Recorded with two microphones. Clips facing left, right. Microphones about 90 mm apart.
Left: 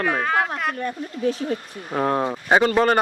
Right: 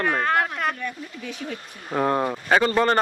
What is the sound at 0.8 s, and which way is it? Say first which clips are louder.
Speech: left 8 dB; 35° left (ahead or behind).